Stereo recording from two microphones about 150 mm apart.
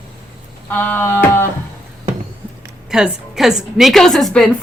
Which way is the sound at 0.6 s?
15° left (ahead or behind).